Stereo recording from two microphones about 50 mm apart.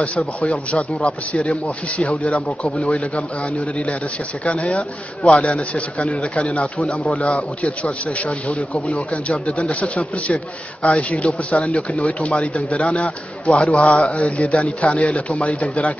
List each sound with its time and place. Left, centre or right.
0.4 s a man's voice: left